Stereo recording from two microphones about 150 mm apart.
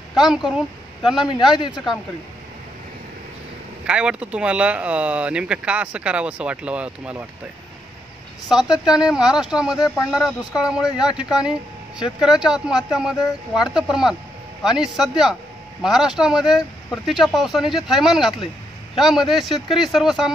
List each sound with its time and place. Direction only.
0.1 s speech: centre (ahead or behind)
3.8 s speech: 5° right (ahead or behind)
8.5 s speech: 5° right (ahead or behind)
9.8 s speech: 25° left (ahead or behind)
10.1 s speech: 5° right (ahead or behind)